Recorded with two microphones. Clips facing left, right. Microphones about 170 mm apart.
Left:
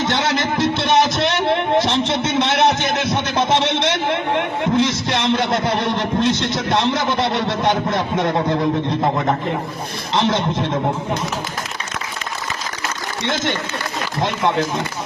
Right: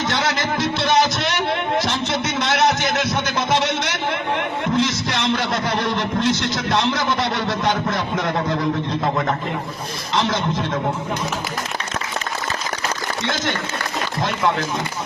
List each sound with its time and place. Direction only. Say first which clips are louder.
0.1 s music: left 2 dB; 25° left (ahead or behind)
1.8 s a sound: left 4 dB; 25° left (ahead or behind)
4.8 s a man's voice: left 2 dB; 25° left (ahead or behind)
10.2 s speech: left 3 dB; 25° left (ahead or behind)
13.2 s speech: left 3 dB; 25° left (ahead or behind)